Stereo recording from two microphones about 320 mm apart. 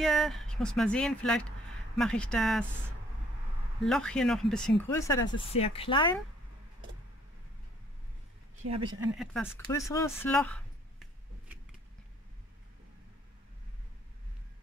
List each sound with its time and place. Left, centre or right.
0.0 s speech: centre
3.8 s speech: centre
8.8 s speech: centre